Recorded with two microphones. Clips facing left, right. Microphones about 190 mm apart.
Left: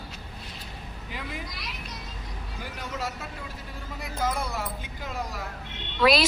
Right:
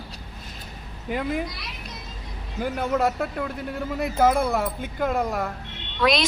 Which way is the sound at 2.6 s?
55° right (ahead or behind).